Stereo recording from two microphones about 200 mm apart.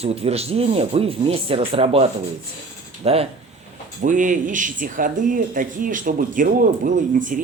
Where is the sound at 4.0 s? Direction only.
40° right (ahead or behind).